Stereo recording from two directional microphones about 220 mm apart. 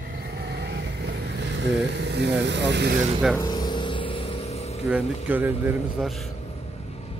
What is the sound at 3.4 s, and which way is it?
Vehicle, 20° left (ahead or behind).